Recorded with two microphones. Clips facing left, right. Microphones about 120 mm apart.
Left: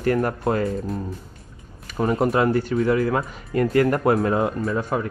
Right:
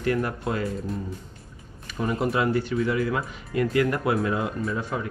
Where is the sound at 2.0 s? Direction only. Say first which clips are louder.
Left 5 dB; 40° left (ahead or behind).